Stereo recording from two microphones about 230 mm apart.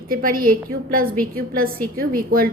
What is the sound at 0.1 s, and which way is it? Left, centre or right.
A woman's voice, right.